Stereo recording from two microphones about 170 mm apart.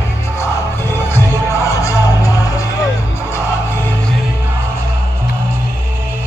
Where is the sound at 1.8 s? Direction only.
20° left (ahead or behind).